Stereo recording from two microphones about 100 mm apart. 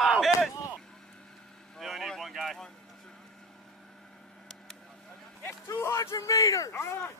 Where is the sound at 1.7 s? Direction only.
Centre (ahead or behind).